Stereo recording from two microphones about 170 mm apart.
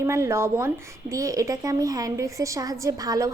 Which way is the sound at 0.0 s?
15° right (ahead or behind).